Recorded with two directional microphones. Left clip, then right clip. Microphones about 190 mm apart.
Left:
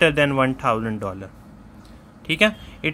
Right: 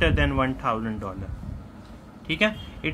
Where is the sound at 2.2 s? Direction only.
50° left (ahead or behind).